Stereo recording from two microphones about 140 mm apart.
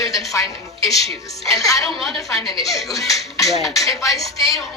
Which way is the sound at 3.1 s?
25° left (ahead or behind).